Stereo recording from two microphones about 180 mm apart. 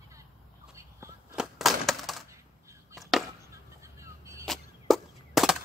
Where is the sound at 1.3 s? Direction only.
Centre (ahead or behind).